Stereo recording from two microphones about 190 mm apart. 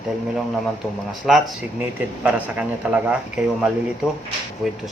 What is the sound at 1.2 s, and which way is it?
A man's voice, centre (ahead or behind).